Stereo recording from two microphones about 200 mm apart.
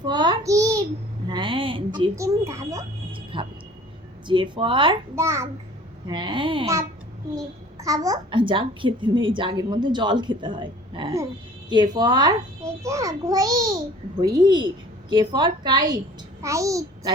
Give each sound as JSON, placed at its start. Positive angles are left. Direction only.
{"t": 0.1, "sound": "a sound", "side_deg": -20}
{"t": 4.3, "sound": "a child's voice", "side_deg": -25}
{"t": 5.1, "sound": "a child's voice", "side_deg": -15}